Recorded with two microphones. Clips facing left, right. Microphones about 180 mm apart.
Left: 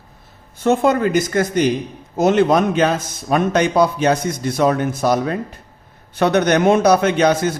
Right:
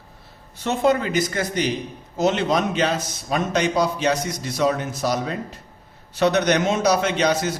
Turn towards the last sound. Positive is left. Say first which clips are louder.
# left 5 dB
turn(degrees=55)  # may be behind; listen again after turning